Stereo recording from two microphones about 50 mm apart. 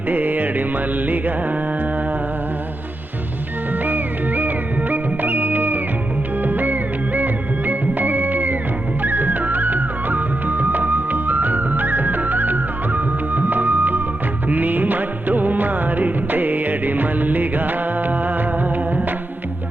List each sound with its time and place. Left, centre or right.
0.1 s music: right
3.8 s music: right